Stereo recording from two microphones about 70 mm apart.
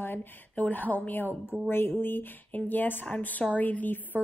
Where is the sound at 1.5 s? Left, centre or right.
Centre.